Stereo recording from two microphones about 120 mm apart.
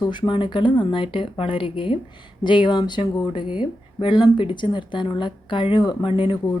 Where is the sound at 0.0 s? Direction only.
40° left (ahead or behind).